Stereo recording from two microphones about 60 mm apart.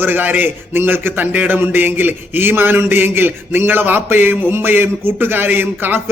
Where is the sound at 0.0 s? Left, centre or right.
Right.